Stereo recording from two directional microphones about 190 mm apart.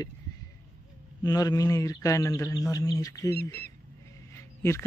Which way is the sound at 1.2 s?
20° left (ahead or behind).